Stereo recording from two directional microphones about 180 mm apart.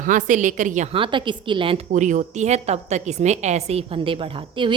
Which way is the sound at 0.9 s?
30° right (ahead or behind).